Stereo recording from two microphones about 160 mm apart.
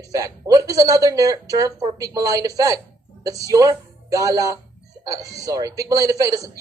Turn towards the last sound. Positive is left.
turn(degrees=-20)  # may be behind; listen again after turning